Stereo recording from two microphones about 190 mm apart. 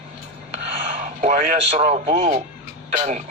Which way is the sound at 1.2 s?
45° right (ahead or behind).